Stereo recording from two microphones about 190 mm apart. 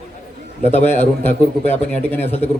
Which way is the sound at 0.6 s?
35° left (ahead or behind).